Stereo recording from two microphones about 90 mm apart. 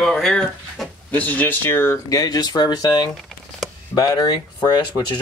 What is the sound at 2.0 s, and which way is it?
Speech, 40° left (ahead or behind).